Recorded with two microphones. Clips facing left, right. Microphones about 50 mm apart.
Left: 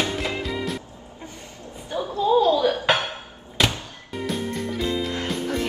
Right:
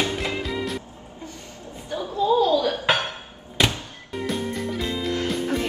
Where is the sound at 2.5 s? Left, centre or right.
Centre.